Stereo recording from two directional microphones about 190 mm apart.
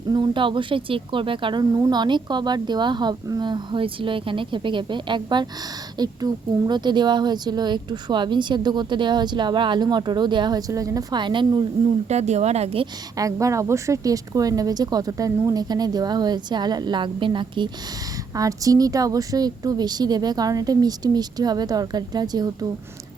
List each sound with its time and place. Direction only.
0.1 s speech: 25° right (ahead or behind)
12.0 s speech: 35° right (ahead or behind)
13.1 s speech: 15° right (ahead or behind)